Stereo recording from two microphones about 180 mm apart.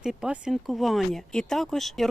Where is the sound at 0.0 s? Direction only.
5° right (ahead or behind).